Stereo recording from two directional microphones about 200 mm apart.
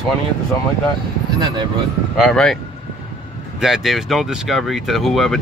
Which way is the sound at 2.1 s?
Centre (ahead or behind).